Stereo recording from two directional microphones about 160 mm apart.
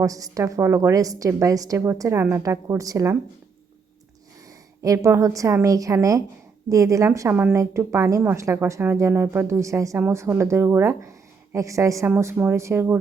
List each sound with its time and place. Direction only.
0.0 s a woman's voice: 20° right (ahead or behind)
4.8 s a woman's voice: 20° right (ahead or behind)